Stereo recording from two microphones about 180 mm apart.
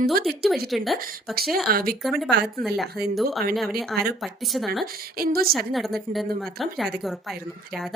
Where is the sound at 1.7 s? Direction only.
55° right (ahead or behind).